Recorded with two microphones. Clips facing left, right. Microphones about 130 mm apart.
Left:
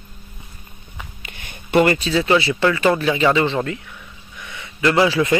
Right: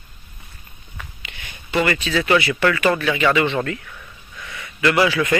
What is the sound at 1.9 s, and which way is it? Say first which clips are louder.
Speech: left 2 dB; 35° left (ahead or behind).